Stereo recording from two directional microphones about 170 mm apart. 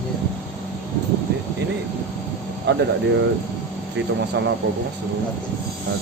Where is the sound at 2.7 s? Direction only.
80° right.